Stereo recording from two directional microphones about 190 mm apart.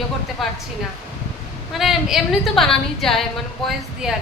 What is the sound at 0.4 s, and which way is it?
Speech, centre (ahead or behind).